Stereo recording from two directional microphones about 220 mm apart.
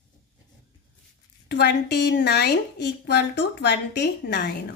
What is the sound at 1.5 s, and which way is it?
A woman's voice, 50° left (ahead or behind).